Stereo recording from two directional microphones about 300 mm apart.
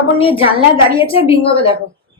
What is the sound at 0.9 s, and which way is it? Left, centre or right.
Speech, centre.